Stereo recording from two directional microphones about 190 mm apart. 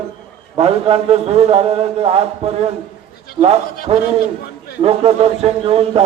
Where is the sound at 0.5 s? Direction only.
30° right (ahead or behind).